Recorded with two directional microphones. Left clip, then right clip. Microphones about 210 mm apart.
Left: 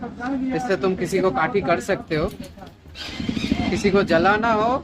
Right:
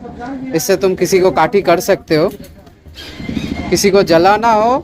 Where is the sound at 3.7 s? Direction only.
25° right (ahead or behind).